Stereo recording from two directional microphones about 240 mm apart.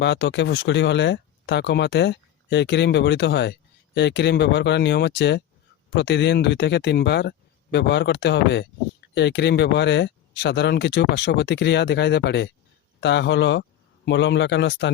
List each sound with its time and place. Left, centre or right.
0.0 s speech: left